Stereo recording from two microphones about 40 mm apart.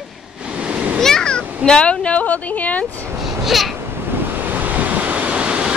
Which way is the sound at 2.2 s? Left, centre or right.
Left.